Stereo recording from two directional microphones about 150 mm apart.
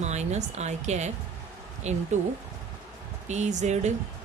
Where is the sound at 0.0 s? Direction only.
50° right (ahead or behind).